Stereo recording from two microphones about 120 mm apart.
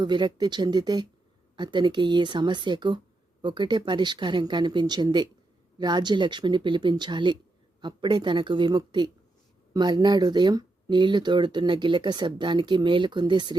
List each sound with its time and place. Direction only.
0.0 s speech: 40° right (ahead or behind)